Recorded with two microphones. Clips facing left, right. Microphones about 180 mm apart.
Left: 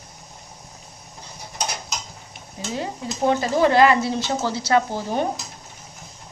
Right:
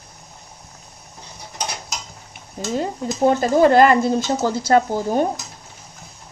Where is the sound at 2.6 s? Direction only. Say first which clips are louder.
Right 5 dB; 45° right (ahead or behind).